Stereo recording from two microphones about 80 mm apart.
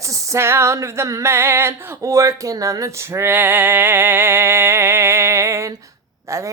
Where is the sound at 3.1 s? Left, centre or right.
Right.